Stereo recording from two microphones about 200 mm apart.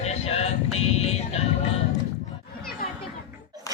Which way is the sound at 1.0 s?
30° left (ahead or behind).